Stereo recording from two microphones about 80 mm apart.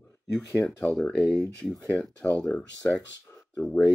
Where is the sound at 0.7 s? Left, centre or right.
Centre.